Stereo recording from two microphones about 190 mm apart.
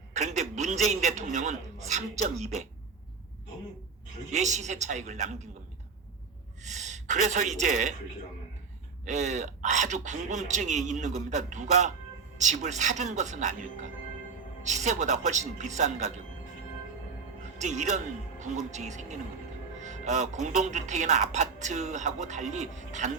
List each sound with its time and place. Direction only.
0.1 s a man's voice: 40° right (ahead or behind)
4.3 s speech: 40° right (ahead or behind)
6.6 s a woman's voice: 40° right (ahead or behind)
9.0 s speech: 35° right (ahead or behind)
17.4 s speech: 40° right (ahead or behind)